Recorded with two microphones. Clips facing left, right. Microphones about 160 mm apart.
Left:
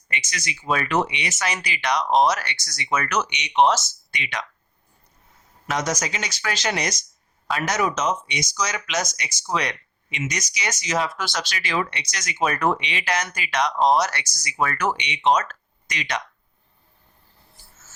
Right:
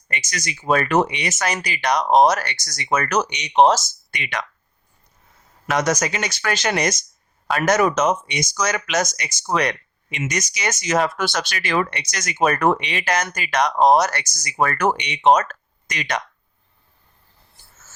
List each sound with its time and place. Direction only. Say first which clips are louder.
0.1 s speech: right 3 dB; 45° right (ahead or behind)
4.1 s speech: right 3 dB; 50° right (ahead or behind)
5.6 s speech: right 5 dB; 60° right (ahead or behind)